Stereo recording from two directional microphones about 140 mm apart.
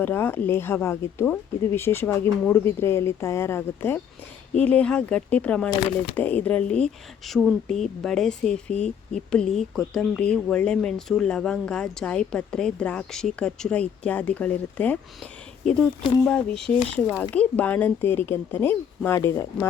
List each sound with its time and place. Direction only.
0.0 s speech: 15° left (ahead or behind)